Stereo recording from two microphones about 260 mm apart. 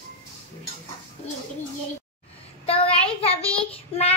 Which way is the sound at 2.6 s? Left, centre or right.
Left.